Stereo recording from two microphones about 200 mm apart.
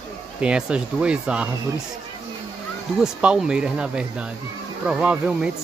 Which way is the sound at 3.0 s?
5° right (ahead or behind).